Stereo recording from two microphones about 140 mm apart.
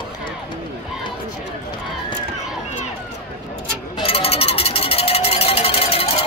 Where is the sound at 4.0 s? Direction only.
45° left (ahead or behind).